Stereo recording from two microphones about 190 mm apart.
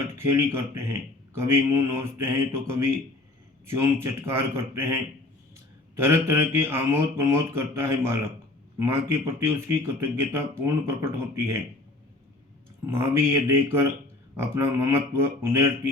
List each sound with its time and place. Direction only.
0.3 s speech: 15° right (ahead or behind)
6.0 s speech: 15° right (ahead or behind)
12.8 s speech: 15° right (ahead or behind)